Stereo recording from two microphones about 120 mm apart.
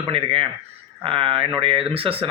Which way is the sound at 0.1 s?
50° right (ahead or behind).